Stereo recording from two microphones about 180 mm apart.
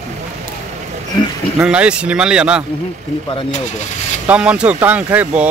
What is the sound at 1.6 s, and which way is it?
Speech, 5° right (ahead or behind).